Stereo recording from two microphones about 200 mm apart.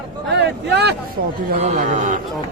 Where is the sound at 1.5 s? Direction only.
40° right (ahead or behind).